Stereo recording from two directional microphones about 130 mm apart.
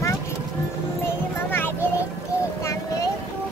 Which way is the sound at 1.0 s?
15° left (ahead or behind).